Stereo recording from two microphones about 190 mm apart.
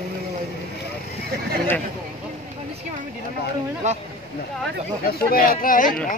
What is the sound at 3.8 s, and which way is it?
Speech, 35° right (ahead or behind).